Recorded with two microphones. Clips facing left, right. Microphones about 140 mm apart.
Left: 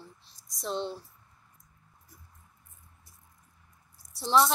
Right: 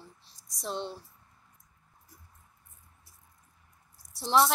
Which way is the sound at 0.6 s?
5° right (ahead or behind).